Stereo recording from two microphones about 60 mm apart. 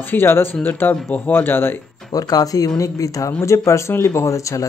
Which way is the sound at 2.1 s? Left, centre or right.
Left.